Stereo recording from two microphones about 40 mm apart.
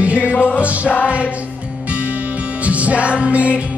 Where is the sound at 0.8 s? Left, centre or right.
Left.